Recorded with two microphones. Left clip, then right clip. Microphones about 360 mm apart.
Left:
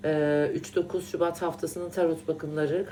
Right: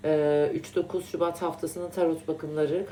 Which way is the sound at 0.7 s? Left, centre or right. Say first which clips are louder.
Even; centre.